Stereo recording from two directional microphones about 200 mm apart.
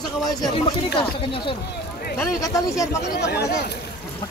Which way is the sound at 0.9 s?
25° left (ahead or behind).